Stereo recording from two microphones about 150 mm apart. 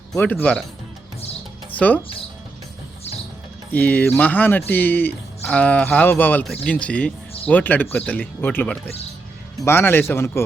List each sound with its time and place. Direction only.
0.2 s speech: 10° left (ahead or behind)
1.7 s music: 10° left (ahead or behind)
3.7 s speech: 10° left (ahead or behind)